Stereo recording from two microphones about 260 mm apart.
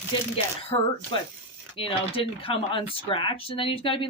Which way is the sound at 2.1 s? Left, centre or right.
Left.